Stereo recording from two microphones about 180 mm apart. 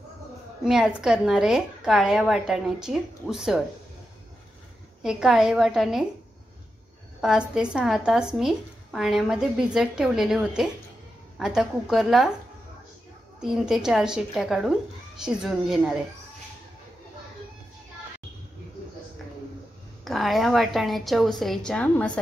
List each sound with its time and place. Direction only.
0.7 s a woman's voice: 5° right (ahead or behind)
5.0 s a woman's voice: centre (ahead or behind)
7.2 s a woman's voice: 5° right (ahead or behind)
13.4 s a woman's voice: centre (ahead or behind)
20.1 s a woman's voice: centre (ahead or behind)